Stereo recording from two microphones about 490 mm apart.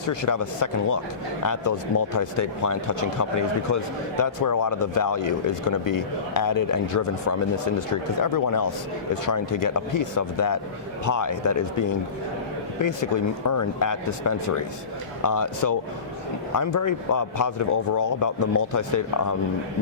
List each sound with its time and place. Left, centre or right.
0.1 s speech: left